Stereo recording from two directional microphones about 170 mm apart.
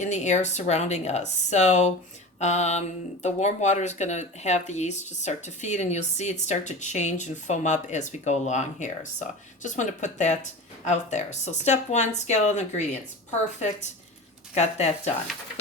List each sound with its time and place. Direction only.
0.0 s speech: 45° left (ahead or behind)